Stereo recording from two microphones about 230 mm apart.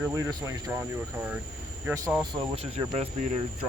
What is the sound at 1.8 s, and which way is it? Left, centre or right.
Speech, centre.